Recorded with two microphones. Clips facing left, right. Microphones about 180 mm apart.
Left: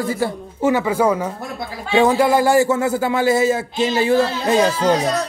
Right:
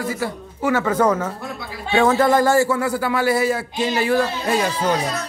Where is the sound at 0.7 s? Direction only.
10° left (ahead or behind).